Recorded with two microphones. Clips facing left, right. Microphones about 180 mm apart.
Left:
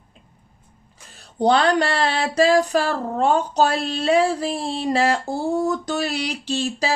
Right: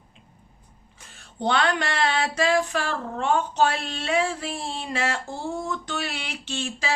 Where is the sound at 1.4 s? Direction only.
35° left (ahead or behind).